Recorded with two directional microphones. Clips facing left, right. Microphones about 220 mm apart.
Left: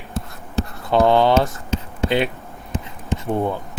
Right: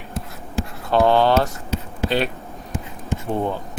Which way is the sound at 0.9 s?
15° left (ahead or behind).